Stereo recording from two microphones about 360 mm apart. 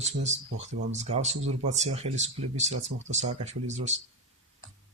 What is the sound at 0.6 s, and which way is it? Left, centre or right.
Speech, centre.